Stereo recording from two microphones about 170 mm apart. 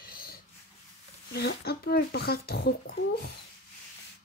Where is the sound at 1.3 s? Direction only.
70° left (ahead or behind).